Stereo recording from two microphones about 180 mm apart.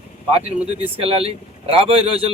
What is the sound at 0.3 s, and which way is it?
Speech, 35° right (ahead or behind).